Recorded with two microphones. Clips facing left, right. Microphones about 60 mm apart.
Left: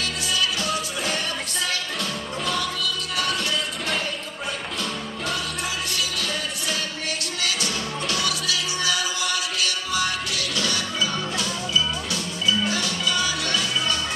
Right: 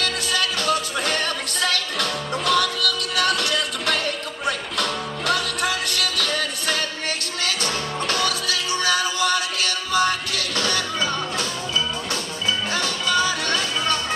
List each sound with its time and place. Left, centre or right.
0.0 s music: right